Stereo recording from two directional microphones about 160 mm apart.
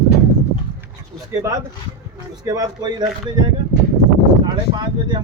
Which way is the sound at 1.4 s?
20° right (ahead or behind).